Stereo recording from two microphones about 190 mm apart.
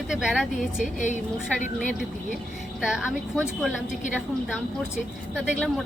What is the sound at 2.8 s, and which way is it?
Speech, 5° right (ahead or behind).